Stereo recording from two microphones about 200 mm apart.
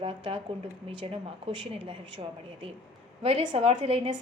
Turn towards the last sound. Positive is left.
turn(degrees=-30)  # may be behind; listen again after turning